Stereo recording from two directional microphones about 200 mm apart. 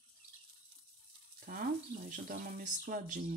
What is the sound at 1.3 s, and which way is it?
Stir, 45° right (ahead or behind).